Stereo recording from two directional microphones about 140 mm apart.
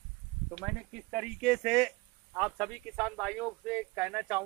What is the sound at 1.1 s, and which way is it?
Speech, 5° right (ahead or behind).